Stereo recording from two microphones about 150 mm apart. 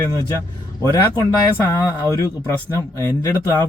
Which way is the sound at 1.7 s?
25° left (ahead or behind).